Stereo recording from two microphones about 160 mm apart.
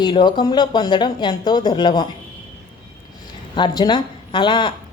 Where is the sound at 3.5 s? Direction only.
30° left (ahead or behind).